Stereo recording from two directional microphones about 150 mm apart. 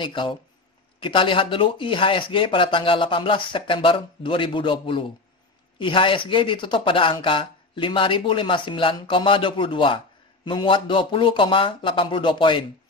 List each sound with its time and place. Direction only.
0.0 s speech: 35° left (ahead or behind)